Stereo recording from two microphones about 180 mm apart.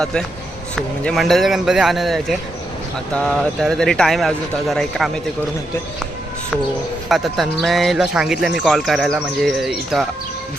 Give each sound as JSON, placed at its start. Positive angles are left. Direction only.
{"t": 0.0, "sound": "speech", "side_deg": 5}
{"t": 7.1, "sound": "speech", "side_deg": 0}